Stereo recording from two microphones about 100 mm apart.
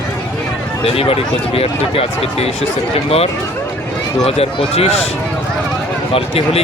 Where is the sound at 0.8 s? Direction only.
75° left (ahead or behind).